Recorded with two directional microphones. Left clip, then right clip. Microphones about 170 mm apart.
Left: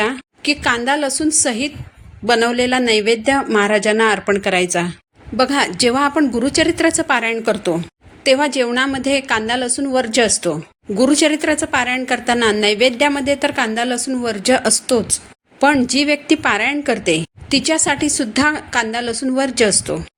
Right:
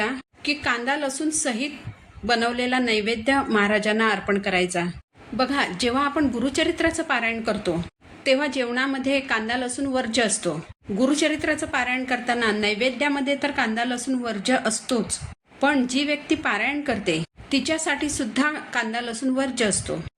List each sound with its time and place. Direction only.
0.0 s a woman's voice: 50° left (ahead or behind)